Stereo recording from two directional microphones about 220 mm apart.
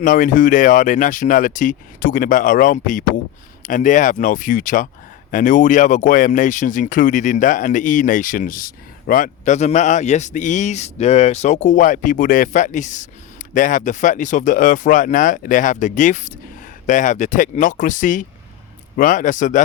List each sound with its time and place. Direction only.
0.0 s speech: 35° left (ahead or behind)